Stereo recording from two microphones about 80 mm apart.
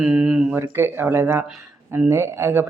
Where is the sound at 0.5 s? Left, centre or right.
Right.